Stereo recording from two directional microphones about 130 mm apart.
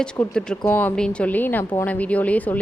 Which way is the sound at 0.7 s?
15° left (ahead or behind).